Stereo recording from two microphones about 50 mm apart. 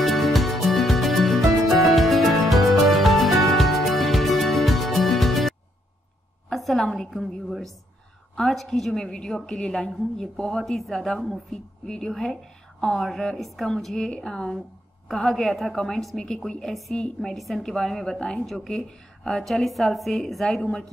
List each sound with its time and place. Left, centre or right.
0.0 s music: centre
6.5 s a sound: centre
7.2 s a woman's voice: centre
11.1 s a woman's voice: centre
11.8 s a woman's voice: centre